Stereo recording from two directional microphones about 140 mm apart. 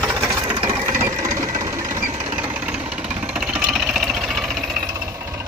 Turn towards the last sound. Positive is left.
turn(degrees=-20)  # may be behind; listen again after turning